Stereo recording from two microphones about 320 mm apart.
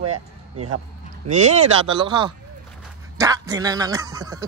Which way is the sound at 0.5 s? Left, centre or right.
Right.